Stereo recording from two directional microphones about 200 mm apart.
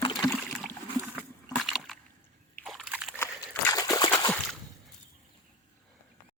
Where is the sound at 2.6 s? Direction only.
Centre (ahead or behind).